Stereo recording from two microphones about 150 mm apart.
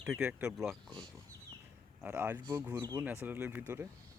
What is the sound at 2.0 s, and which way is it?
Speech, 15° right (ahead or behind).